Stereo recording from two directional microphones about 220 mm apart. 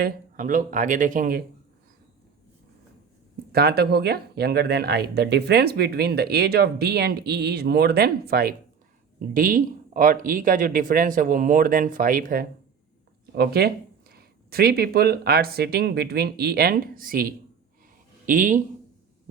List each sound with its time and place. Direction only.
0.0 s speech: 35° right (ahead or behind)
3.5 s speech: 45° right (ahead or behind)